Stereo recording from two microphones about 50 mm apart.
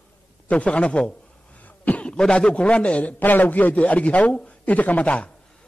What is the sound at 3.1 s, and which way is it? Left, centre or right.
A man's voice, left.